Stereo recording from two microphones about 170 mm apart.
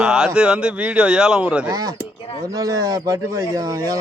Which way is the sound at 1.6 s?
20° right (ahead or behind).